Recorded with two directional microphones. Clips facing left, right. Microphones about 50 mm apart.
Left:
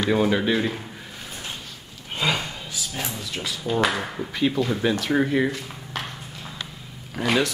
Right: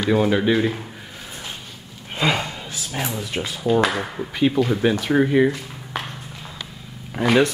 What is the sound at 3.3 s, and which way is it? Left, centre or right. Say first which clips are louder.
Speech: right 3 dB; right.